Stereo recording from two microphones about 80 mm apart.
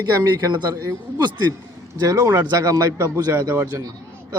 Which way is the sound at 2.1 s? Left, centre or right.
Right.